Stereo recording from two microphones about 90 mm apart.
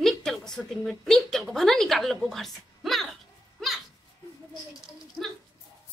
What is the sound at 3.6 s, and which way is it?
Goat, 5° left (ahead or behind).